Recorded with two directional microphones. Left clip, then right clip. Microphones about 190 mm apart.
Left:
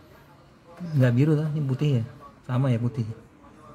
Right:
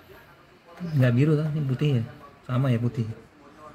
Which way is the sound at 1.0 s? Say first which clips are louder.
Even; 15° left (ahead or behind).